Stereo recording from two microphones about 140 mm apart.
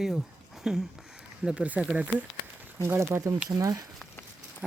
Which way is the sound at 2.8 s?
20° right (ahead or behind).